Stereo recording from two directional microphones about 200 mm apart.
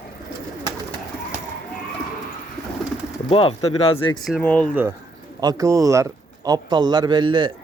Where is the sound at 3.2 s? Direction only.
30° left (ahead or behind).